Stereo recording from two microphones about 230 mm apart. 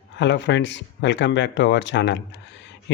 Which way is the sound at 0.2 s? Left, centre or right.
Left.